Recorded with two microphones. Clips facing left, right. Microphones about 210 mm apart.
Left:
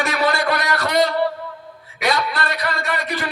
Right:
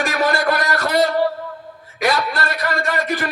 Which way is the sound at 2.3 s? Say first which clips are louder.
Right 2 dB; 45° right (ahead or behind).